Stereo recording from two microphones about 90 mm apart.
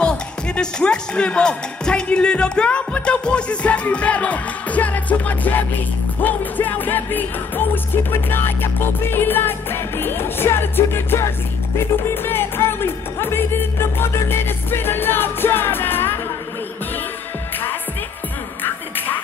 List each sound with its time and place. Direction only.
0.0 s music: 10° left (ahead or behind)
18.6 s music: 20° left (ahead or behind)